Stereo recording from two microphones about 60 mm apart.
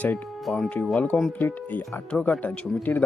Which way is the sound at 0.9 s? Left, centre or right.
Left.